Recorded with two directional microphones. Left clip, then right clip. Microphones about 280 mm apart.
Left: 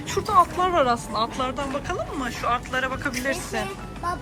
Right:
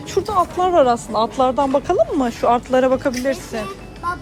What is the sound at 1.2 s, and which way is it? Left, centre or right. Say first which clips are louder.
Speech: right 9 dB; centre.